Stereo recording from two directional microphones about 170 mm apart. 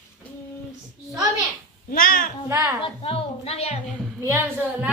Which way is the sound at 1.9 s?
55° left (ahead or behind).